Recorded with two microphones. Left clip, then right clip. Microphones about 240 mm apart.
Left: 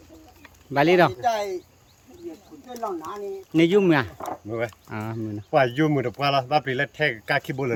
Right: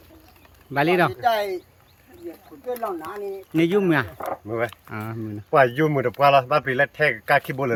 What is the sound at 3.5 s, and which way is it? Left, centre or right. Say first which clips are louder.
Speech: left 1 dB; centre.